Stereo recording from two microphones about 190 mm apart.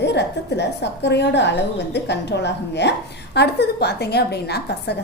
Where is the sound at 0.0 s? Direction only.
65° left (ahead or behind).